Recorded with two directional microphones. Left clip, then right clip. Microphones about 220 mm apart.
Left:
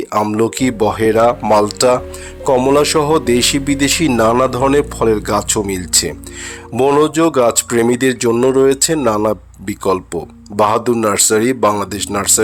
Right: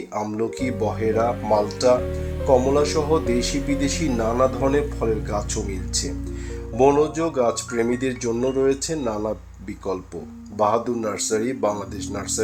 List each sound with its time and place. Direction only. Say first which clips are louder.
0.1 s speech: left 11 dB; 35° left (ahead or behind)